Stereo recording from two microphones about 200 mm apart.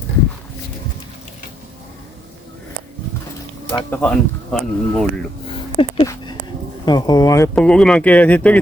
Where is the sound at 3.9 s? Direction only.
5° left (ahead or behind).